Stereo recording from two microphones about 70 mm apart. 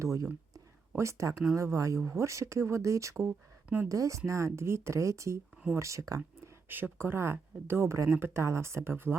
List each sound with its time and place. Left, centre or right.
0.0 s speech: right
0.5 s a sound: right
1.5 s speech: right
6.7 s speech: right